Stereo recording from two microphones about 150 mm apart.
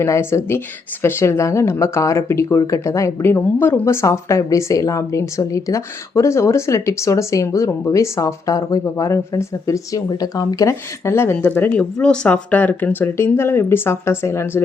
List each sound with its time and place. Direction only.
0.0 s speech: 15° left (ahead or behind)